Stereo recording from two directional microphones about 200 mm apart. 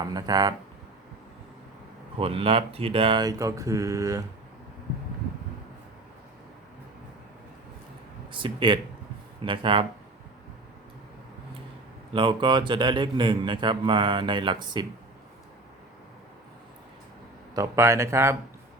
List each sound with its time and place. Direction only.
0.0 s a man's voice: 20° right (ahead or behind)
2.1 s a man's voice: 30° right (ahead or behind)
8.3 s a man's voice: 25° right (ahead or behind)
12.1 s a man's voice: 25° right (ahead or behind)
17.5 s speech: 15° right (ahead or behind)